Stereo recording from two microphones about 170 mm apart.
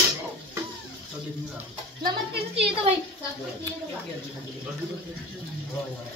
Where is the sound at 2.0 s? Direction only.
30° right (ahead or behind).